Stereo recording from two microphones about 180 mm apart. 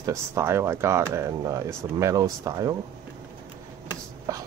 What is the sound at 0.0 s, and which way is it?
Speech, 15° right (ahead or behind).